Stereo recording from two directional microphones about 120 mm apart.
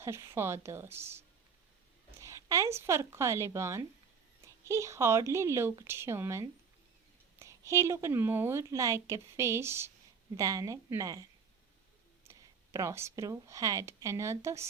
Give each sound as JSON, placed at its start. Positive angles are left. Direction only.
{"t": 0.0, "sound": "a woman's voice", "side_deg": -25}
{"t": 2.2, "sound": "a woman's voice", "side_deg": -25}